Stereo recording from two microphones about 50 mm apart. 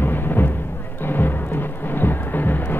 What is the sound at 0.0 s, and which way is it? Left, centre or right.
Music, left.